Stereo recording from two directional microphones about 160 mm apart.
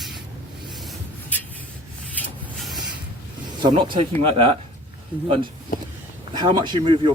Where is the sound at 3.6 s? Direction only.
30° right (ahead or behind).